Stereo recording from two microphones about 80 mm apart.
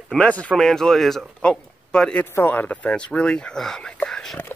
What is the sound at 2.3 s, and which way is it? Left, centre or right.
A man's voice, left.